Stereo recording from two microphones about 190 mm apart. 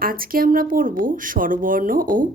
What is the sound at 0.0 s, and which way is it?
Speech, 50° right (ahead or behind).